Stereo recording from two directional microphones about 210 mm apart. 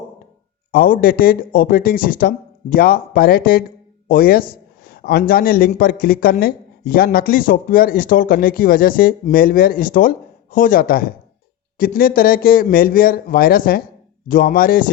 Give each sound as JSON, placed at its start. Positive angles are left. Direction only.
{"t": 0.7, "sound": "a man's voice", "side_deg": 45}